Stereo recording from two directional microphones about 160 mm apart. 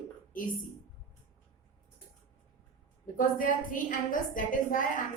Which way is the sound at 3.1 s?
55° left (ahead or behind).